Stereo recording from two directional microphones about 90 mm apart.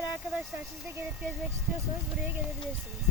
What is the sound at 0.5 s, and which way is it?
Speech, 30° right (ahead or behind).